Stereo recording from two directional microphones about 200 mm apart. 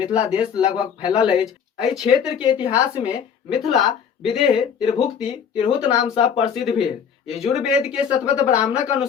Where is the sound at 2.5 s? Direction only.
25° left (ahead or behind).